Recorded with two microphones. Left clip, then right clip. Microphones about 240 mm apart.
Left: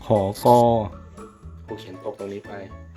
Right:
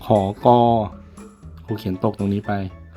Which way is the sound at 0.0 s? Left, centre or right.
Centre.